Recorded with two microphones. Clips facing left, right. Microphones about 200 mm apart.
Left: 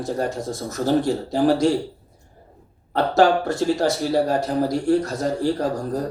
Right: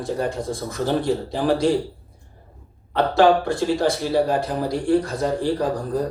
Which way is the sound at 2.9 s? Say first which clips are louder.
Right 1 dB; 45° left (ahead or behind).